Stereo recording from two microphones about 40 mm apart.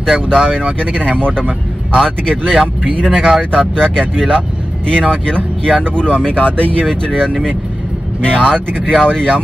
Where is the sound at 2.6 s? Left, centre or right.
Right.